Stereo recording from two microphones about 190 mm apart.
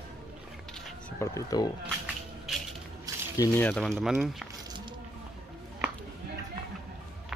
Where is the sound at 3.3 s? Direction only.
15° left (ahead or behind); by 4.4 s centre (ahead or behind).